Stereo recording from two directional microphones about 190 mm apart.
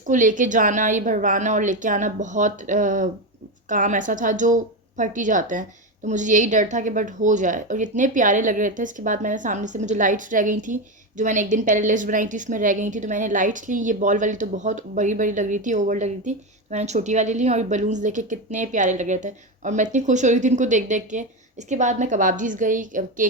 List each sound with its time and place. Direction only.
0.1 s a woman's voice: 45° right (ahead or behind)